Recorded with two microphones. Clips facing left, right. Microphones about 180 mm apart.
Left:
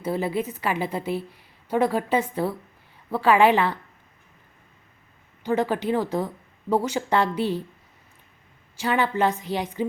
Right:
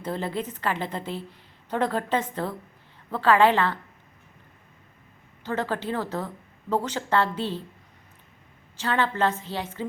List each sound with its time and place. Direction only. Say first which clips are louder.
0.0 s a woman's voice: left 4 dB; 10° left (ahead or behind)
5.4 s a woman's voice: left 5 dB; 15° left (ahead or behind)
8.7 s a woman's voice: left 2 dB; 10° left (ahead or behind)